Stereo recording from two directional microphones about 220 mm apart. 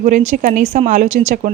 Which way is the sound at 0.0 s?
35° right (ahead or behind).